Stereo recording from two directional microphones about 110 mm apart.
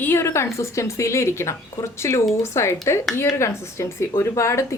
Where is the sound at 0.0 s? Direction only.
20° left (ahead or behind).